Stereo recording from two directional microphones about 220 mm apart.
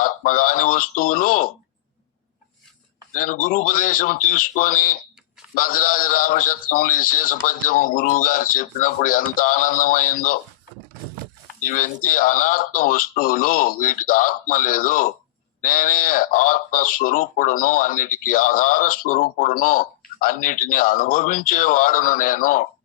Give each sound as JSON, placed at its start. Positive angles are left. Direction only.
{"t": 0.0, "sound": "speech", "side_deg": 40}
{"t": 3.1, "sound": "speech", "side_deg": 40}
{"t": 11.6, "sound": "speech", "side_deg": 40}